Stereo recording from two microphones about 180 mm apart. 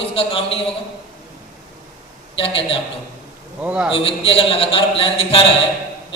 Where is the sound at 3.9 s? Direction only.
30° left (ahead or behind).